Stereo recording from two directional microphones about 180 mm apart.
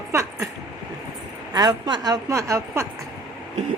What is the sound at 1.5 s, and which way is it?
A woman's voice, 25° right (ahead or behind).